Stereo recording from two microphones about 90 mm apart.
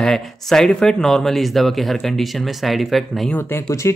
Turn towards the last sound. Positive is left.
turn(degrees=30)  # may be behind; listen again after turning